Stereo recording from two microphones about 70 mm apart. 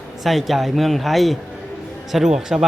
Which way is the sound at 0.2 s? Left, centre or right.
Centre.